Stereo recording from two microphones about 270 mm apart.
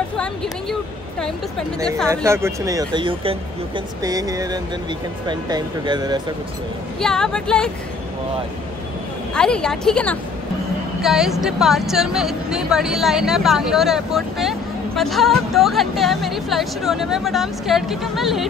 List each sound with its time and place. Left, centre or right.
2.0 s speech: centre
7.0 s speech: centre
9.3 s speech: centre